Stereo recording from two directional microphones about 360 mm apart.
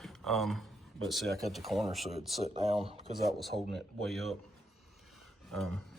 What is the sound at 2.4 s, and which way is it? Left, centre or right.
Speech, centre.